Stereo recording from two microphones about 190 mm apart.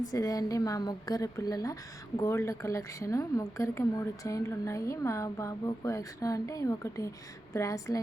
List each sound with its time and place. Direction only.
0.1 s a woman's voice: 20° left (ahead or behind)